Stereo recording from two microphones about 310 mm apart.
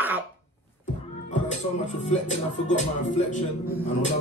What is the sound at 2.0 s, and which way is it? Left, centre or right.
Speech, left.